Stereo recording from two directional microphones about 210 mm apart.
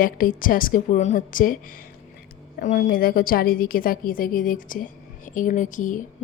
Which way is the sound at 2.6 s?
40° left (ahead or behind).